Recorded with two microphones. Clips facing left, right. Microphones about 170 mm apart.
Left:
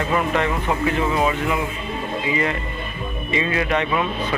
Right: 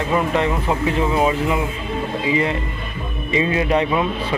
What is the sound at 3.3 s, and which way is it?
Speech, 25° right (ahead or behind).